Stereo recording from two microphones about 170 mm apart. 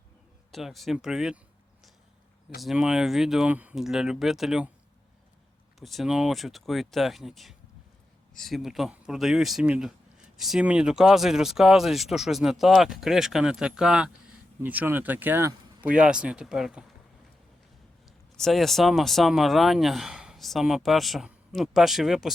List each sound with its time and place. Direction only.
0.5 s speech: centre (ahead or behind)
2.6 s speech: centre (ahead or behind)
5.8 s speech: centre (ahead or behind)
18.3 s speech: centre (ahead or behind)